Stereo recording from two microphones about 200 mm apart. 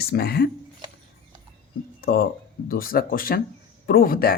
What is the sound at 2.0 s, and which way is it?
Speech, 50° left (ahead or behind).